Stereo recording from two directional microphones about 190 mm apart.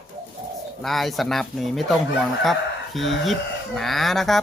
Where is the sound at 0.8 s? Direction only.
Centre (ahead or behind).